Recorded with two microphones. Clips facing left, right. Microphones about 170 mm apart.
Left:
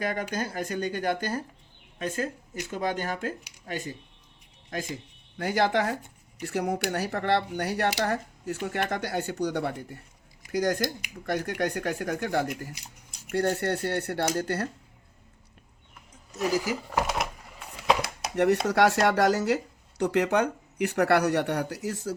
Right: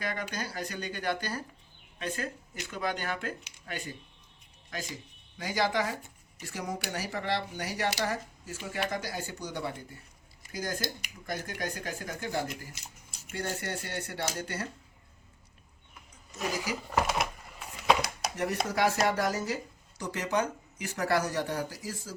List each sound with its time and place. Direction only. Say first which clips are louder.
0.0 s speech: left 6 dB; 45° left (ahead or behind)
5.4 s speech: left 5 dB; 60° left (ahead or behind)
12.7 s scissors: left 3 dB; 15° left (ahead or behind)
13.3 s speech: left 9 dB; 70° left (ahead or behind)
16.5 s speech: left 7 dB; 40° left (ahead or behind)
17.6 s a sound: left 1 dB; centre (ahead or behind)
18.3 s speech: left 8 dB; 70° left (ahead or behind)
20.0 s speech: left 7 dB; 65° left (ahead or behind)